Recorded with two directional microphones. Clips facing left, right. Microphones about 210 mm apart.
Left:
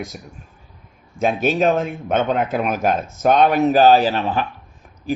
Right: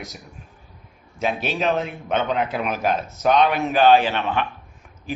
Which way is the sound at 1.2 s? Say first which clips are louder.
Left 6 dB; 45° left (ahead or behind).